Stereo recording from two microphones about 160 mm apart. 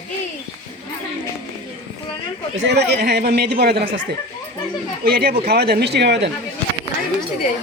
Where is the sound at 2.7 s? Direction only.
90° right.